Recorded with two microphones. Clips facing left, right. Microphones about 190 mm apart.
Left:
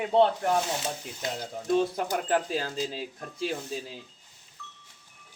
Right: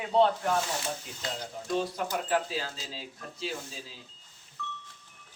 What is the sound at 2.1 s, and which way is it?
Speech, 50° left (ahead or behind).